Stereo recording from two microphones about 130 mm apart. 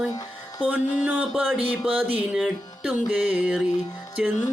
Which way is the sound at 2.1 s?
5° right (ahead or behind).